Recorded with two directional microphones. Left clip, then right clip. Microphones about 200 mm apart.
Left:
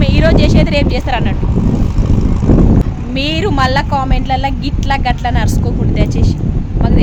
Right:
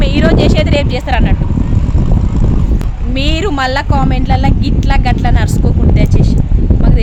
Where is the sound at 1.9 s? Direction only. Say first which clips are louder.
Left 1 dB; 35° left (ahead or behind).